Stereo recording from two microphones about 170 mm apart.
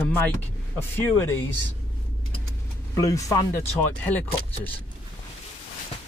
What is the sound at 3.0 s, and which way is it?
Speech, 20° left (ahead or behind).